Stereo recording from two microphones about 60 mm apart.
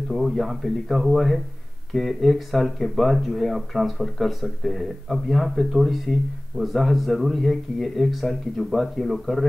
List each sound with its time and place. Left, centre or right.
0.1 s speech: centre